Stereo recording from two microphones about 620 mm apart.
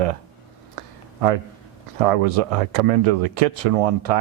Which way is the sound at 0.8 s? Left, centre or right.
Right.